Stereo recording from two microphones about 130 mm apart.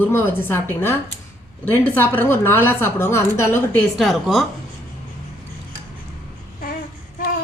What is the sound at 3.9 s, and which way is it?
Speech, centre (ahead or behind).